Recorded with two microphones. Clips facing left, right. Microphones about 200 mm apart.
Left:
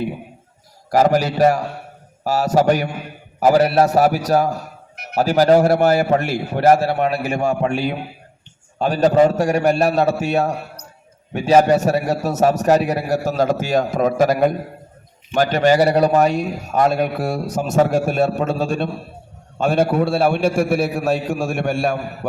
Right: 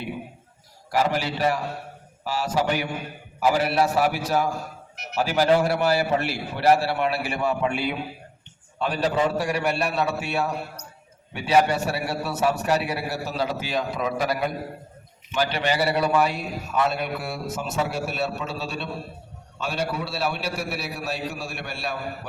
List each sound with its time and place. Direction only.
0.9 s a man's voice: 45° left (ahead or behind)